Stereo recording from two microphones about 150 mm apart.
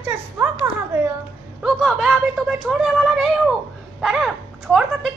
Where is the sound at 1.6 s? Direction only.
Centre (ahead or behind).